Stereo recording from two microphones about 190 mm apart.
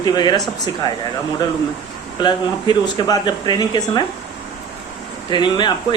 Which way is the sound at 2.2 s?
20° left (ahead or behind).